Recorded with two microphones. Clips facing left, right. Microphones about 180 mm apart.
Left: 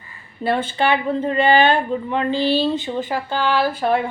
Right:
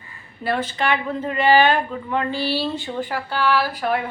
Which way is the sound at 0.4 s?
30° left (ahead or behind).